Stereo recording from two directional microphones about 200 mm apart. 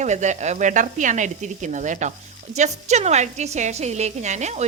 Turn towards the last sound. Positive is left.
turn(degrees=-35)  # may be behind; listen again after turning